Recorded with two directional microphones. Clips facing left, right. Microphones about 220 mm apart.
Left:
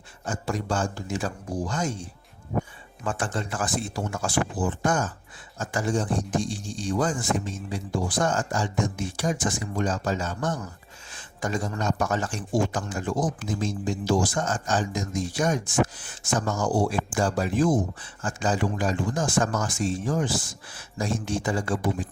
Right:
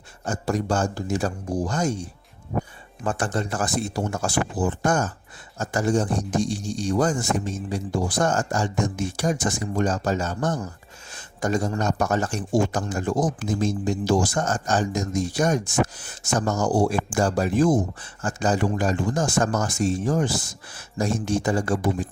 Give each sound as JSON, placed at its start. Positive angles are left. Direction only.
{"t": 0.3, "sound": "speech", "side_deg": -40}